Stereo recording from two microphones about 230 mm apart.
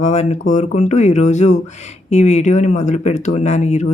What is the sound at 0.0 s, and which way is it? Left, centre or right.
Speech, left.